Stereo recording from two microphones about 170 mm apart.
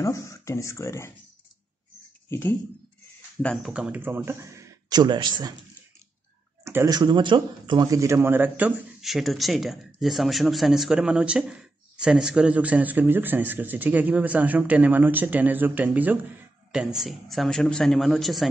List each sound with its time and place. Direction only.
0.0 s speech: 20° left (ahead or behind)
2.2 s speech: 10° left (ahead or behind)
3.4 s speech: 5° right (ahead or behind); by 5.5 s 25° right (ahead or behind)
6.6 s speech: 15° right (ahead or behind); by 18.5 s centre (ahead or behind)